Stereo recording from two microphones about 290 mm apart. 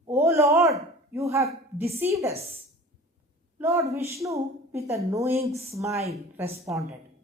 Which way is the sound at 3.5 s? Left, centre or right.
Centre.